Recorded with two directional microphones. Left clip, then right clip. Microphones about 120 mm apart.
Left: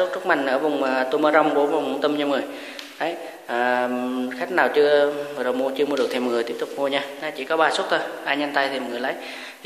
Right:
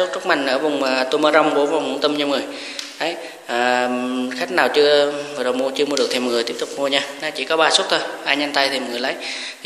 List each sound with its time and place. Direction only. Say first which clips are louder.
0.0 s a man's voice: right 2 dB; 5° right (ahead or behind)
3.0 s mantra: right 2 dB; 10° right (ahead or behind)
4.4 s a man's voice: right 3 dB; 10° right (ahead or behind)